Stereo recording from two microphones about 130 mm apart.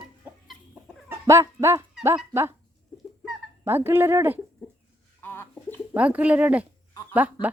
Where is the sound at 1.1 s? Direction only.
20° right (ahead or behind).